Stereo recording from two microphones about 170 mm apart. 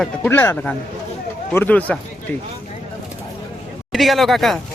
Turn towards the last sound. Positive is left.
turn(degrees=0)  # may be behind; listen again after turning